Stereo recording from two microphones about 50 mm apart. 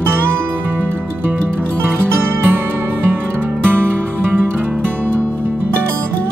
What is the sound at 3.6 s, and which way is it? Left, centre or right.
Music, right.